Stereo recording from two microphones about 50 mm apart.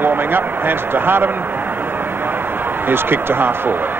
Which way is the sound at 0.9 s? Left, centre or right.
Right.